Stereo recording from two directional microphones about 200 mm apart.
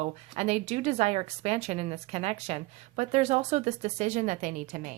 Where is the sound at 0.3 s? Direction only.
35° right (ahead or behind).